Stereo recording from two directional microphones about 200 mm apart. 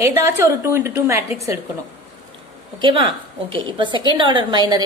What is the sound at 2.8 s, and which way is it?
A woman's voice, 25° right (ahead or behind).